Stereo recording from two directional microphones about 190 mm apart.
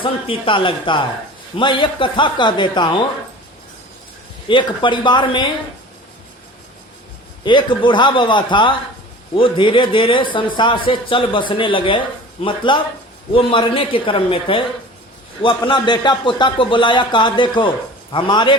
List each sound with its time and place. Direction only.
0.0 s a man's voice: 25° left (ahead or behind)
4.4 s a man's voice: 25° left (ahead or behind)
7.4 s a man's voice: 25° left (ahead or behind)